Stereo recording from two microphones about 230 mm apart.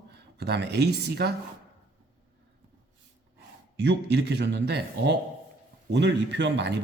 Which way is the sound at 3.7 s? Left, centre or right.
Right.